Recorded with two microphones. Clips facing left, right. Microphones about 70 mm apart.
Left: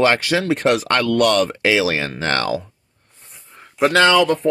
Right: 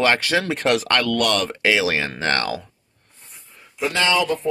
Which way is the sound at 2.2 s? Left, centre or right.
Left.